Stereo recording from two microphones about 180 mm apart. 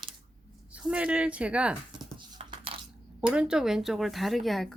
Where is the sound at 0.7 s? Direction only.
5° right (ahead or behind).